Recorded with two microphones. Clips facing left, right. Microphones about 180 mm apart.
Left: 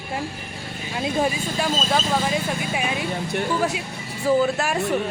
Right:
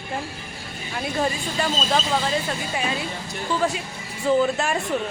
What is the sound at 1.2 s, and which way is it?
Speech, 10° left (ahead or behind).